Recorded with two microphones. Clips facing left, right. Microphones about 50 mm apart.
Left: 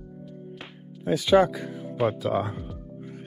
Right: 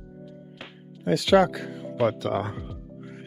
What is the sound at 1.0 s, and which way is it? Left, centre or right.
Speech, right.